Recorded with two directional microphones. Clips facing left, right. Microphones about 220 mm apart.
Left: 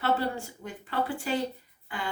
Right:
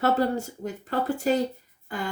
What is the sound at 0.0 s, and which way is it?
Speech, 45° right (ahead or behind).